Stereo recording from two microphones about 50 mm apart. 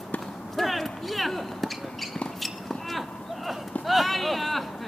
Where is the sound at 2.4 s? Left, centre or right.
Centre.